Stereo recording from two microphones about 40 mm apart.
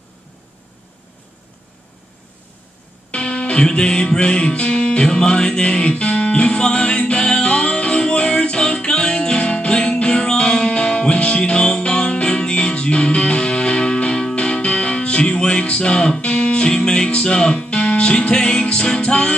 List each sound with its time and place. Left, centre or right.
3.1 s music: left